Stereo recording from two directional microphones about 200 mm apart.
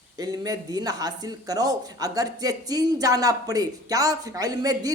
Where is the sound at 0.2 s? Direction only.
20° right (ahead or behind).